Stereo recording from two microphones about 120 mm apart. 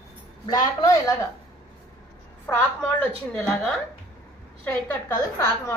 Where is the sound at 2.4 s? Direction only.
15° left (ahead or behind).